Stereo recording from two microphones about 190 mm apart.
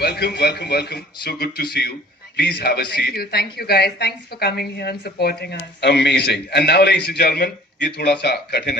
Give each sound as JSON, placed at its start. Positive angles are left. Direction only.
{"t": 0.0, "sound": "speech", "side_deg": 60}